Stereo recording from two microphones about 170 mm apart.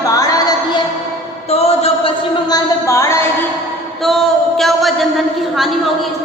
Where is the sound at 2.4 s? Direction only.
20° left (ahead or behind).